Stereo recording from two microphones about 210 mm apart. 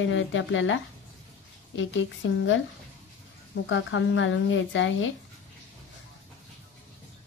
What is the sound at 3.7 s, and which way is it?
A woman's voice, 65° left (ahead or behind).